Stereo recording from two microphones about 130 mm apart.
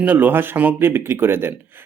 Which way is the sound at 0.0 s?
15° right (ahead or behind).